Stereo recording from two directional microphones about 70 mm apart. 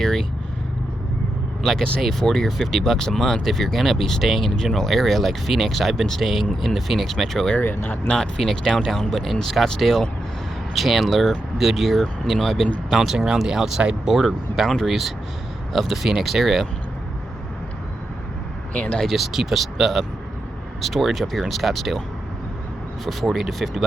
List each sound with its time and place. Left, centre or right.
0.0 s vehicle: centre
1.6 s speech: centre
7.6 s speech: left
8.1 s speech: centre
18.7 s speech: centre
19.0 s speech: centre
23.0 s speech: centre